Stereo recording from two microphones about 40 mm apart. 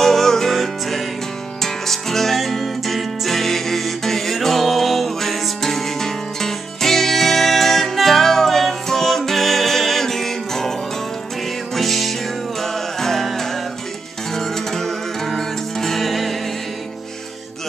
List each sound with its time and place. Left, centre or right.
0.0 s music: centre
11.7 s music: centre